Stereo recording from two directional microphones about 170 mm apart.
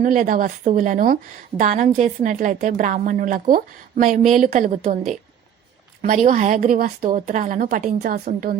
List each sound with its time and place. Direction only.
0.0 s a woman's voice: 50° right (ahead or behind)